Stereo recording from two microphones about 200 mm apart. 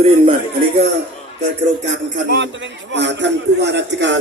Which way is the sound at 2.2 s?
60° right (ahead or behind).